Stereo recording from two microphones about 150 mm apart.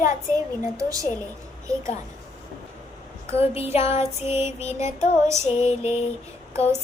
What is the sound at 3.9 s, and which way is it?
Music, 45° left (ahead or behind).